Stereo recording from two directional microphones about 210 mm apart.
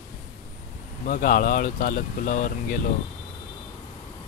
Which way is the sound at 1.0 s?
45° left (ahead or behind).